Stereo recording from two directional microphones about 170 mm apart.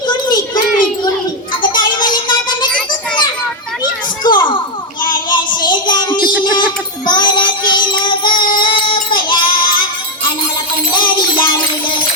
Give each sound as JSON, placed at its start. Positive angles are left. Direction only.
{"t": 1.6, "sound": "music", "side_deg": 25}
{"t": 4.2, "sound": "a sound", "side_deg": 25}
{"t": 5.3, "sound": "child singing", "side_deg": 25}
{"t": 10.9, "sound": "music", "side_deg": 25}